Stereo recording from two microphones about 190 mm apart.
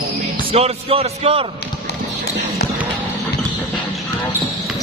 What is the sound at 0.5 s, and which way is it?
Music, 30° right (ahead or behind).